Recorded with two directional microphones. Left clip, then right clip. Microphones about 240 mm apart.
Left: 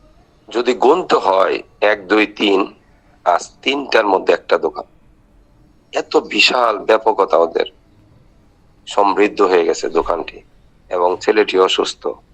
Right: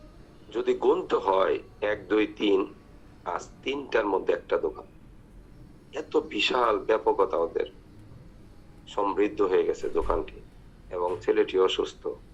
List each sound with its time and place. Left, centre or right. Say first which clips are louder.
0.5 s a man's voice: left 11 dB; left
5.9 s a man's voice: left 12 dB; left
8.9 s a man's voice: left 13 dB; left